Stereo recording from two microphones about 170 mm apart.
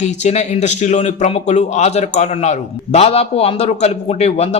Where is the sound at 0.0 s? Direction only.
40° left (ahead or behind).